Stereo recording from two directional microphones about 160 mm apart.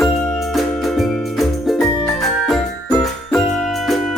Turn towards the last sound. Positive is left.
turn(degrees=0)  # may be behind; listen again after turning